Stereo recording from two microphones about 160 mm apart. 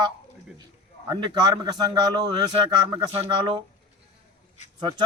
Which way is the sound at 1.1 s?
25° right (ahead or behind).